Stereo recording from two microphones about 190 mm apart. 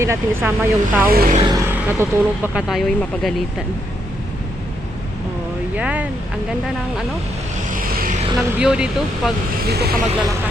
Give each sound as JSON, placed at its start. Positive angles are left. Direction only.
{"t": 0.0, "sound": "speech", "side_deg": -15}
{"t": 1.1, "sound": "speech", "side_deg": -50}
{"t": 1.4, "sound": "vehicle", "side_deg": -25}
{"t": 1.6, "sound": "speech", "side_deg": -10}
{"t": 5.7, "sound": "speech", "side_deg": -5}
{"t": 7.7, "sound": "vehicle", "side_deg": -50}
{"t": 8.4, "sound": "speech", "side_deg": -5}
{"t": 9.6, "sound": "speech", "side_deg": -55}